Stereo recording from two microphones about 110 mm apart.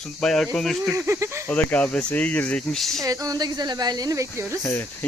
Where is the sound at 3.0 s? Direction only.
35° right (ahead or behind).